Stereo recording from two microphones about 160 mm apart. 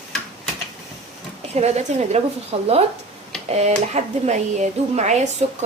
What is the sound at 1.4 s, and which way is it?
Speech, 40° right (ahead or behind).